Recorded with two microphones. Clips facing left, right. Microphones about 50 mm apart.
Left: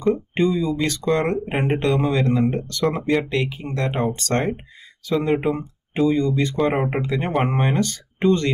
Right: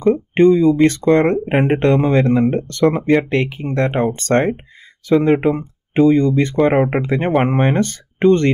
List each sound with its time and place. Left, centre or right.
0.0 s speech: right